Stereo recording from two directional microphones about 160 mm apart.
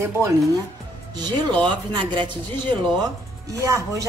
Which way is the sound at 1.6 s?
30° right (ahead or behind).